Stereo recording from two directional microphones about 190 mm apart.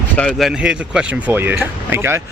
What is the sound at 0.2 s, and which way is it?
Speech, centre (ahead or behind).